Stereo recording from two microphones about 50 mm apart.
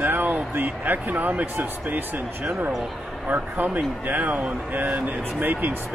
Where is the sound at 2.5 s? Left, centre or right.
Right.